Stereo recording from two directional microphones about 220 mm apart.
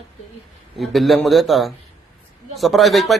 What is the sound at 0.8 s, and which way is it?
A man's voice, centre (ahead or behind).